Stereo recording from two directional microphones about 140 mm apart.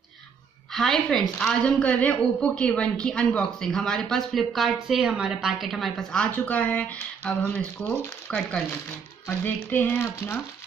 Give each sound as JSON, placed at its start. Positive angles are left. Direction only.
{"t": 0.7, "sound": "a woman's voice", "side_deg": 0}